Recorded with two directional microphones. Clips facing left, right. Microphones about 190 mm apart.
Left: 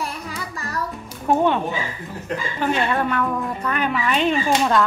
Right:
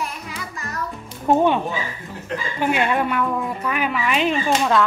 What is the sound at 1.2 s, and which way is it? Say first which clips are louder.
Speech: right 1 dB; 15° right (ahead or behind).